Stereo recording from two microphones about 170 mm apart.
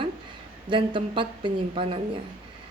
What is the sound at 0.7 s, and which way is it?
Speech, 30° right (ahead or behind).